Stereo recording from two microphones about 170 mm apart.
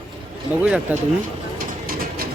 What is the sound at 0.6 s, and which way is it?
Speech, 10° right (ahead or behind).